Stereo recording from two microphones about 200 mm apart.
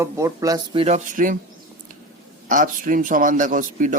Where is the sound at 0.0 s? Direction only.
15° right (ahead or behind); by 1.4 s 40° right (ahead or behind).